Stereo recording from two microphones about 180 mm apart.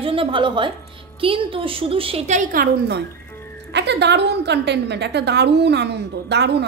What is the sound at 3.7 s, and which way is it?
A woman's voice, 70° right (ahead or behind).